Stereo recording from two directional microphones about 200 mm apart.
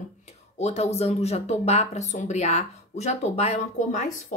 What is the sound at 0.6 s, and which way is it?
Speech, 35° left (ahead or behind).